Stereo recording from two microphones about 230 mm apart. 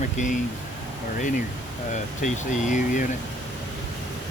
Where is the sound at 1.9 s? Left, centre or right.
Left.